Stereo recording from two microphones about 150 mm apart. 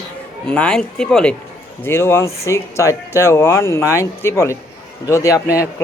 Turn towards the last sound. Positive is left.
turn(degrees=20)  # may be behind; listen again after turning